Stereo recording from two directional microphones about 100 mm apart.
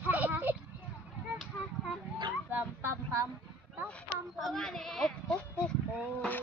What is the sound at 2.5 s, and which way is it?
Dog, 20° right (ahead or behind).